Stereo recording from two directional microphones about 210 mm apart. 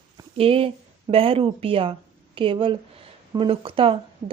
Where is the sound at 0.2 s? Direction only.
25° right (ahead or behind).